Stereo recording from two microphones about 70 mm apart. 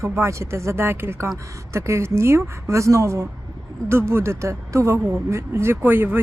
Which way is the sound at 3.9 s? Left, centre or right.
Right.